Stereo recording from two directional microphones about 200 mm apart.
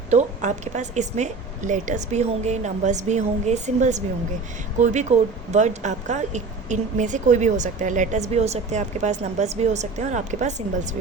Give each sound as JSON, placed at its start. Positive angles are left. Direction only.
{"t": 0.1, "sound": "a woman's voice", "side_deg": -35}